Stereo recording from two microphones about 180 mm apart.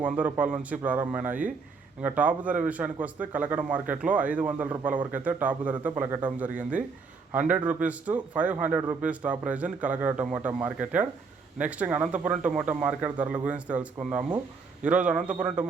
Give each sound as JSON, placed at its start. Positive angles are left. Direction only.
{"t": 0.0, "sound": "speech", "side_deg": -10}
{"t": 1.3, "sound": "speech", "side_deg": -50}
{"t": 2.0, "sound": "speech", "side_deg": -10}